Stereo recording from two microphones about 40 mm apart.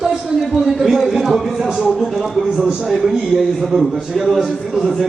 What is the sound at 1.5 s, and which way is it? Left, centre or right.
Speech, centre.